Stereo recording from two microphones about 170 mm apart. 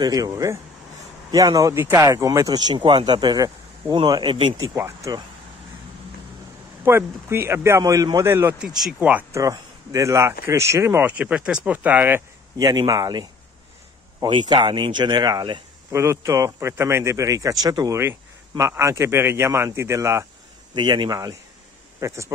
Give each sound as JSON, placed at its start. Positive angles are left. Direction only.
{"t": 0.0, "sound": "speech", "side_deg": -20}
{"t": 6.8, "sound": "speech", "side_deg": -15}
{"t": 8.6, "sound": "speech", "side_deg": 0}
{"t": 15.9, "sound": "speech", "side_deg": -15}